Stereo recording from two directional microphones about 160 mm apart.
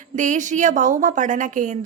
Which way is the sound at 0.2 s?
50° right (ahead or behind).